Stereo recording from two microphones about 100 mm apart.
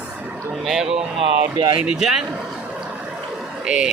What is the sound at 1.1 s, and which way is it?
Speech, 65° right (ahead or behind).